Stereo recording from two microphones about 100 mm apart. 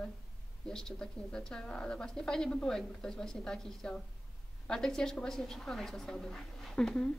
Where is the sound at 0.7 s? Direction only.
5° left (ahead or behind).